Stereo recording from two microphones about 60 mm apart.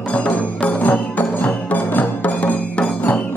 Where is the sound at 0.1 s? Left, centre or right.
Left.